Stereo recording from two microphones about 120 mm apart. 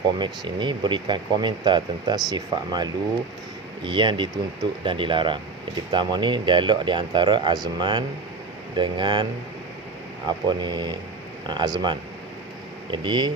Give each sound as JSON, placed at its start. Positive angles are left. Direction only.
{"t": 0.2, "sound": "speech", "side_deg": -40}
{"t": 10.2, "sound": "speech", "side_deg": -35}